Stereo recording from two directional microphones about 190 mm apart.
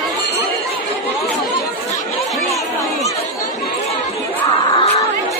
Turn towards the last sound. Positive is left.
turn(degrees=25)  # may be behind; listen again after turning